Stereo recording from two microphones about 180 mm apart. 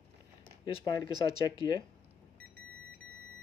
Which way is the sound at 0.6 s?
20° left (ahead or behind).